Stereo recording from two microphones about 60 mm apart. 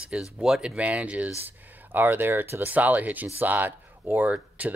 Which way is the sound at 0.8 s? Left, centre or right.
Right.